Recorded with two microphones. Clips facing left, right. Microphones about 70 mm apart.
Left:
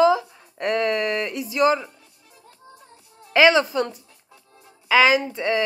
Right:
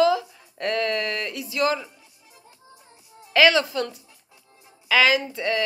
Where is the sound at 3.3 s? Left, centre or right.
Left.